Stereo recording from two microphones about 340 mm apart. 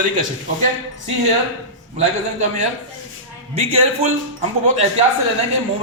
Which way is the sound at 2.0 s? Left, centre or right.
Right.